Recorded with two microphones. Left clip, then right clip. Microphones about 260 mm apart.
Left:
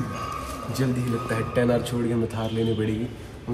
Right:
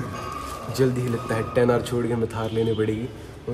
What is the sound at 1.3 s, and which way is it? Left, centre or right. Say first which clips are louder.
Speech: right 3 dB; right.